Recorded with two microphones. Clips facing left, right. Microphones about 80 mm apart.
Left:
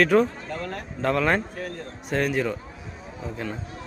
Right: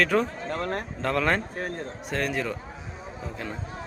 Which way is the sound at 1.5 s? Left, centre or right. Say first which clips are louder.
Right 1 dB; right.